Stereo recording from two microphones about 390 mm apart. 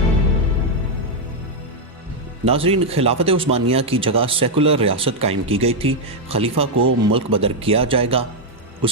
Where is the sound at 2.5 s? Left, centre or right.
Centre.